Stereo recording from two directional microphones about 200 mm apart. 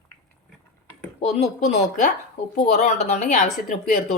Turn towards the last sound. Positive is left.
turn(degrees=40)  # may be behind; listen again after turning